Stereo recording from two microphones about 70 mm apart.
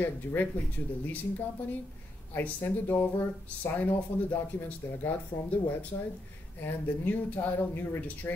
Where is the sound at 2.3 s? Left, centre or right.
Left.